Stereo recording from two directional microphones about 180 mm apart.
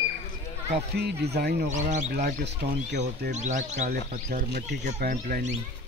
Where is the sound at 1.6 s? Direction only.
40° right (ahead or behind).